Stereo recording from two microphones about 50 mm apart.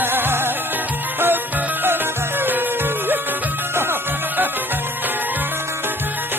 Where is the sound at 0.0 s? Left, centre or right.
Right.